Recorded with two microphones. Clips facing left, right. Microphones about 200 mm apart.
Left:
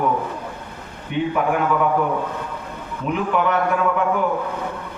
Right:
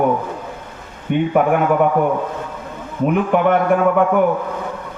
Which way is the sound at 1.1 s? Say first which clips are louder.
Right 5 dB; 55° right (ahead or behind).